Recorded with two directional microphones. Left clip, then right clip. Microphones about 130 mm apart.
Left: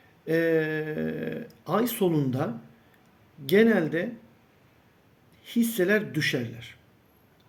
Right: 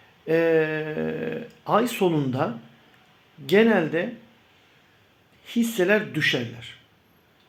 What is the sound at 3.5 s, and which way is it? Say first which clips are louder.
Speech: right 2 dB; 35° left (ahead or behind).